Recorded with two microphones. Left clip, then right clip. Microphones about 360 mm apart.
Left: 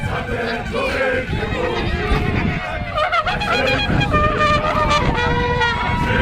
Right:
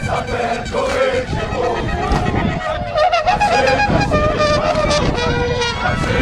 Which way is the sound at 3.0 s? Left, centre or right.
Right.